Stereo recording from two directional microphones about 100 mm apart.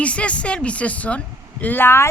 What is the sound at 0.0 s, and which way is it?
A woman's voice, 10° left (ahead or behind).